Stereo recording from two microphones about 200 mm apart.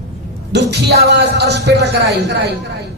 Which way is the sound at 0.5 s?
55° right (ahead or behind).